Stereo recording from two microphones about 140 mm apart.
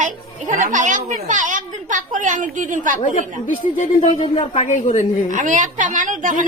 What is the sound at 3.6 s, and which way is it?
A woman's voice, 65° left (ahead or behind).